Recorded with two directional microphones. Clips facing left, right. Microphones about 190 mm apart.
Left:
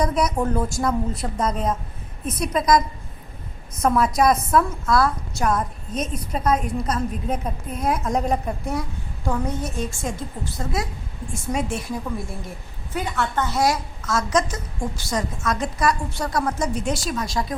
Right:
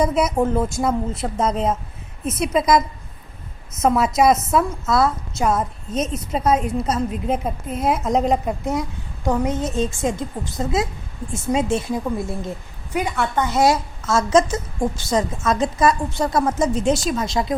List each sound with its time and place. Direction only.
0.3 s a woman's voice: 20° right (ahead or behind)
3.7 s a woman's voice: 25° right (ahead or behind)